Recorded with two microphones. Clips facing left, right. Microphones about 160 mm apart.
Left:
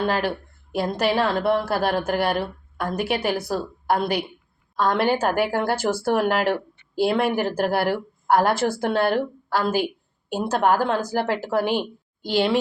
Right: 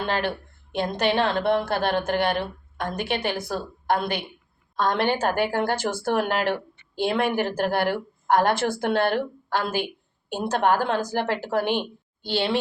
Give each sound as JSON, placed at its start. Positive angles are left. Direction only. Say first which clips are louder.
{"t": 0.0, "sound": "a woman's voice", "louder": "left 3 dB", "side_deg": 5}
{"t": 9.1, "sound": "speech", "louder": "left 2 dB", "side_deg": 40}
{"t": 10.2, "sound": "a woman's voice", "louder": "left 2 dB", "side_deg": 5}